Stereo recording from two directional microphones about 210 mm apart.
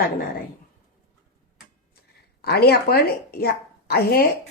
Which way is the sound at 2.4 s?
50° left (ahead or behind).